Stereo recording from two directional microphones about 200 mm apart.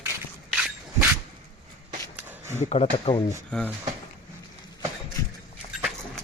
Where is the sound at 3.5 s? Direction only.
5° left (ahead or behind).